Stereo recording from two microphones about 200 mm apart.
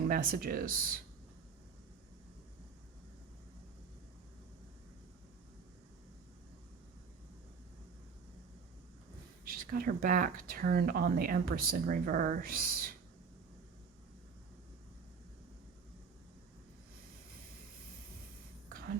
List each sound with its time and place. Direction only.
0.1 s speech: 45° right (ahead or behind)
9.4 s speech: 45° right (ahead or behind)